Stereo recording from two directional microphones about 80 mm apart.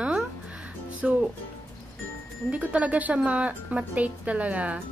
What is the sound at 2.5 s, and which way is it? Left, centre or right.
A woman's voice, centre.